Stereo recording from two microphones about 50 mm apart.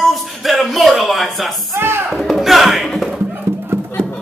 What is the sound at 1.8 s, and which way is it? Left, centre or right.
Music, right.